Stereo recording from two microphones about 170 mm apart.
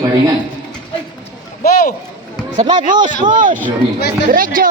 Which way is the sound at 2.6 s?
25° right (ahead or behind).